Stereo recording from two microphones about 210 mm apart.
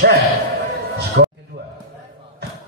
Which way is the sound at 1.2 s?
60° right (ahead or behind).